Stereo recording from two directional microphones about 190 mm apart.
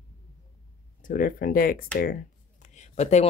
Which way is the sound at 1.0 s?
45° left (ahead or behind).